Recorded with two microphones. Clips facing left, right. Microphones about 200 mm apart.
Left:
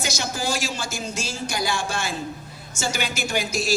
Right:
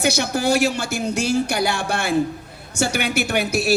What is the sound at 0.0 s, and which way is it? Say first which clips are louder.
Speech: right 8 dB; 60° right (ahead or behind).